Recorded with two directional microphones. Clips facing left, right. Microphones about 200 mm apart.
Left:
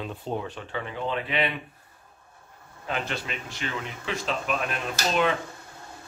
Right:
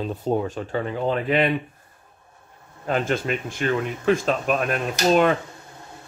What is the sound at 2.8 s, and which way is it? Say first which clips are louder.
Speech: right 8 dB; 45° right (ahead or behind).